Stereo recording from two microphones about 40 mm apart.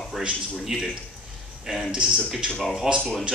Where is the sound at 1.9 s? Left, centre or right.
Right.